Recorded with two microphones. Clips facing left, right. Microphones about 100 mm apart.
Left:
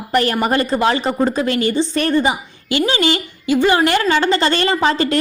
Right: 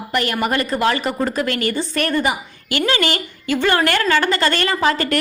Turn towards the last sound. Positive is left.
turn(degrees=25)  # may be behind; listen again after turning